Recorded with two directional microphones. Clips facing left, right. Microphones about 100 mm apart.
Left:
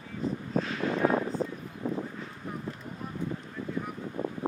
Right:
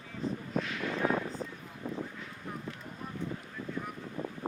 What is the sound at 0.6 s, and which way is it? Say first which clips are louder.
Vehicle: left 5 dB; 35° left (ahead or behind).